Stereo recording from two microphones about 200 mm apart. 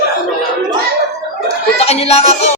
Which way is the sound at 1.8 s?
30° left (ahead or behind).